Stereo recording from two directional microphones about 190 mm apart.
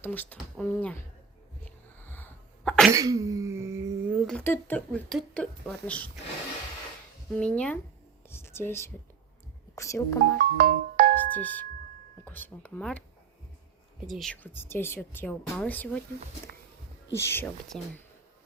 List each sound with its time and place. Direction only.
0.0 s a woman's voice: 10° left (ahead or behind)
1.6 s sneeze: 10° left (ahead or behind)
2.9 s a sound: 20° right (ahead or behind)
4.3 s speech: 10° left (ahead or behind)
7.3 s a woman's voice: 5° left (ahead or behind)
10.3 s music: 50° right (ahead or behind)
11.3 s a woman's voice: 10° left (ahead or behind)
14.1 s a woman's voice: centre (ahead or behind)
17.1 s a woman's voice: 15° left (ahead or behind)